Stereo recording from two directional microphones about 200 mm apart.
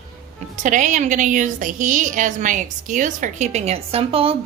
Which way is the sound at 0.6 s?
40° right (ahead or behind).